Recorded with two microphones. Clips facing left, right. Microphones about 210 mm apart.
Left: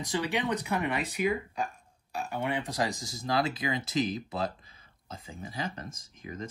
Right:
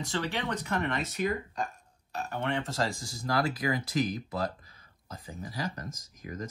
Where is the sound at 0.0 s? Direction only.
15° left (ahead or behind).